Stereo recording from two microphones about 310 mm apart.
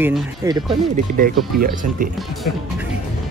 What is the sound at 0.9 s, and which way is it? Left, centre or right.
Speech, right.